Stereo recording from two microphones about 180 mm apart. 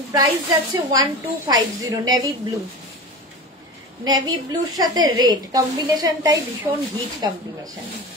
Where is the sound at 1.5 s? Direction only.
20° right (ahead or behind).